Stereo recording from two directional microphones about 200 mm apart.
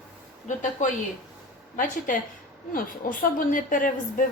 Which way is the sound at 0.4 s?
40° left (ahead or behind).